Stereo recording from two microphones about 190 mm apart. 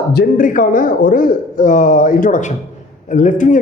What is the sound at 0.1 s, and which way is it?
A man's voice, 50° left (ahead or behind).